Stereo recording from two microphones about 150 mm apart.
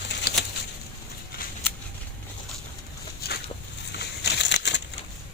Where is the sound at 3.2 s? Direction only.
90° left.